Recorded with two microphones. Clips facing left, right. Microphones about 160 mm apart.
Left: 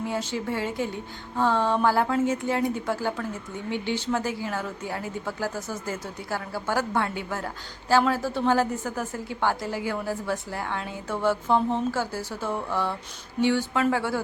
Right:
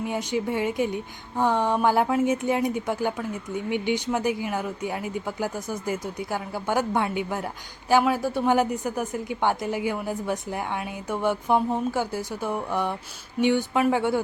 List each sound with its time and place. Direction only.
0.0 s a woman's voice: 15° right (ahead or behind)